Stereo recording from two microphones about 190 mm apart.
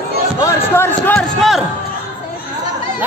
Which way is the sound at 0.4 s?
15° left (ahead or behind).